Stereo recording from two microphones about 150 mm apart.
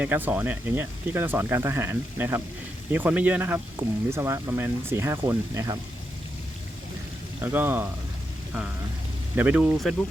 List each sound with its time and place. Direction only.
0.0 s speech: 10° right (ahead or behind)
7.4 s speech: 15° right (ahead or behind)
9.3 s speech: 10° right (ahead or behind)